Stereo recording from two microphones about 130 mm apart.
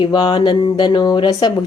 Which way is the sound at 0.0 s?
40° left (ahead or behind).